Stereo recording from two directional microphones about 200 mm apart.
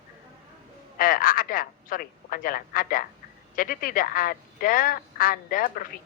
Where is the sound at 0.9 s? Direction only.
45° left (ahead or behind).